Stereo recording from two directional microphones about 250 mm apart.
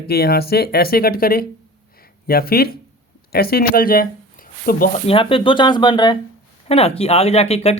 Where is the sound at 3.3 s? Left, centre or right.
Left.